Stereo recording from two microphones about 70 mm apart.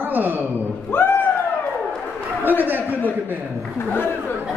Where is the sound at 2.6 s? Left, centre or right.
Right.